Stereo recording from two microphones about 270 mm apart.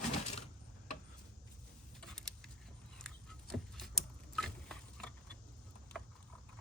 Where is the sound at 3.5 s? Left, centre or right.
Centre.